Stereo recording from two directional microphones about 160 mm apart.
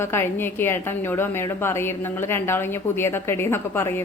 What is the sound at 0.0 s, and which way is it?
A woman's voice, 15° left (ahead or behind).